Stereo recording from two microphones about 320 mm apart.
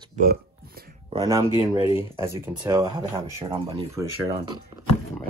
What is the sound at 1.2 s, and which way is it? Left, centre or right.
Speech, centre.